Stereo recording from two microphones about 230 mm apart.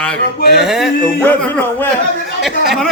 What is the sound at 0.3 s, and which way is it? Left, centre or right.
Speech, left.